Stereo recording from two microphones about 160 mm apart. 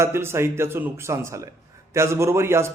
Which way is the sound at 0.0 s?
15° right (ahead or behind).